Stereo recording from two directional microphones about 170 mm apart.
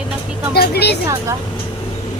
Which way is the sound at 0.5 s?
70° left (ahead or behind).